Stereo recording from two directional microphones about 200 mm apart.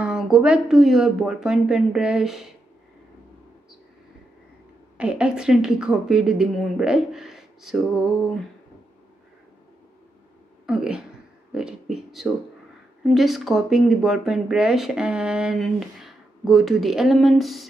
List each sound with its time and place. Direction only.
0.0 s speech: 5° right (ahead or behind)
4.9 s speech: 5° right (ahead or behind)
10.7 s speech: 5° right (ahead or behind)